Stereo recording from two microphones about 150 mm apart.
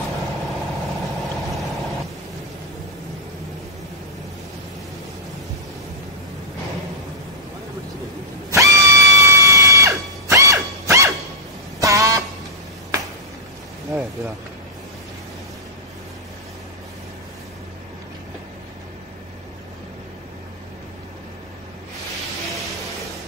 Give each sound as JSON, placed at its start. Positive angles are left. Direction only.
{"t": 8.5, "sound": "screaming", "side_deg": -20}
{"t": 11.8, "sound": "vehicle horn", "side_deg": -20}